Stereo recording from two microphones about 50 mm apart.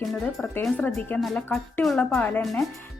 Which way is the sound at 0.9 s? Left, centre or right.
Left.